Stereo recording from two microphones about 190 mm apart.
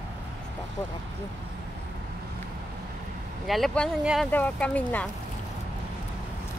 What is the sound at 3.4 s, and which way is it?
Speech, centre (ahead or behind).